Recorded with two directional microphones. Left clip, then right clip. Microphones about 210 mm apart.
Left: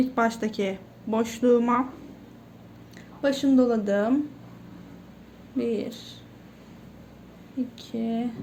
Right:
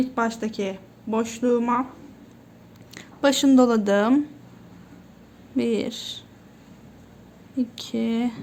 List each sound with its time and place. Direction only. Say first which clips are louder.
0.0 s speech: left 1 dB; 5° right (ahead or behind)
2.9 s speech: right 5 dB; 35° right (ahead or behind)
5.5 s speech: right 4 dB; 30° right (ahead or behind)
7.8 s speech: right 4 dB; 30° right (ahead or behind)